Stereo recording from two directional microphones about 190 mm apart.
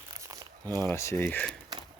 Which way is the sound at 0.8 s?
15° left (ahead or behind).